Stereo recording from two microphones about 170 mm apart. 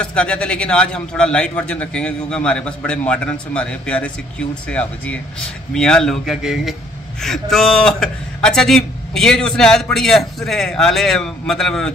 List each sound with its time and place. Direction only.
0.0 s a man's voice: 5° left (ahead or behind)